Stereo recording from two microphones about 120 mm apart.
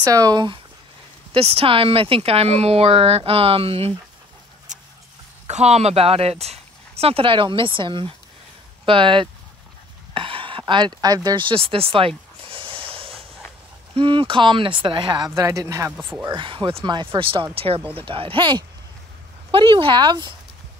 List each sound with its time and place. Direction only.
0.0 s speech: 30° right (ahead or behind)
1.3 s a woman's voice: 55° right (ahead or behind)
5.5 s a woman's voice: 65° right (ahead or behind); by 9.3 s 45° right (ahead or behind)
10.1 s a sound: 50° right (ahead or behind)
13.9 s speech: 45° right (ahead or behind); by 16.1 s 25° right (ahead or behind)
16.3 s speech: 45° right (ahead or behind)